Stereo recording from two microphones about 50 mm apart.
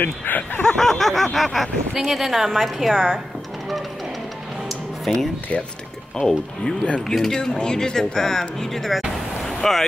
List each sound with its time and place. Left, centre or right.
0.0 s speech: left
0.7 s speech: centre
5.1 s speech: centre
9.4 s boat: centre